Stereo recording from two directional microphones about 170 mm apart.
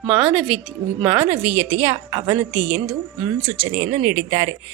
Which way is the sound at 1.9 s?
30° right (ahead or behind).